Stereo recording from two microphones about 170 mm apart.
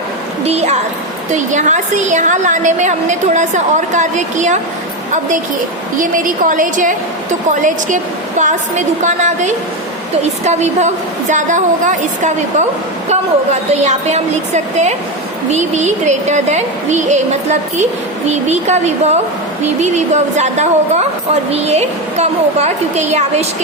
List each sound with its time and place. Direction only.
0.4 s a woman's voice: 40° right (ahead or behind)
6.0 s a woman's voice: 50° right (ahead or behind)